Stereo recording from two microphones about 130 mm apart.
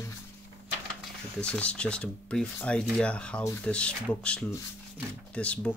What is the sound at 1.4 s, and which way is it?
Speech, 10° left (ahead or behind).